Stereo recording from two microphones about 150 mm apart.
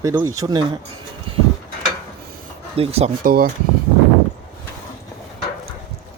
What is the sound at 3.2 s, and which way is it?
Speech, 75° right (ahead or behind).